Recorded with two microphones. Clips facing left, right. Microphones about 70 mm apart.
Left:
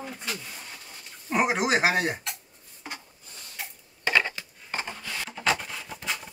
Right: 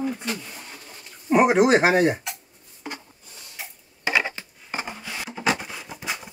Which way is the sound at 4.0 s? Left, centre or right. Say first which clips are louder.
Right 1 dB; centre.